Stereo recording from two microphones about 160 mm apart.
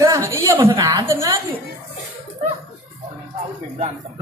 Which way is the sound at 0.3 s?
20° right (ahead or behind).